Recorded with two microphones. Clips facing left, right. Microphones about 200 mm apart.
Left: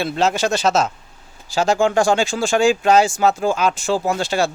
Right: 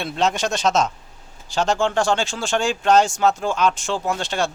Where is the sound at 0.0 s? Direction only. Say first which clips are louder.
Left 3 dB; 5° left (ahead or behind).